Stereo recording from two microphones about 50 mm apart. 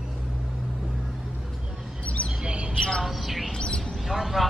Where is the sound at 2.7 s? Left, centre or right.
Centre.